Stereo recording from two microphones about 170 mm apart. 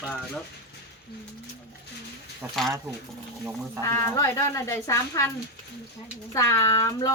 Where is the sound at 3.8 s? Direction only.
15° left (ahead or behind).